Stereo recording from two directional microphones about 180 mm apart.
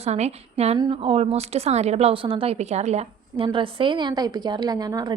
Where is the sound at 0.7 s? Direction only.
25° right (ahead or behind).